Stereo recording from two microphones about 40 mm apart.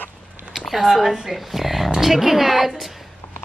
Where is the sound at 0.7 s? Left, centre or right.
Centre.